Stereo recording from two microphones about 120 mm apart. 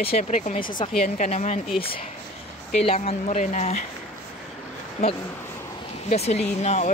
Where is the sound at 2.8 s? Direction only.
60° left (ahead or behind).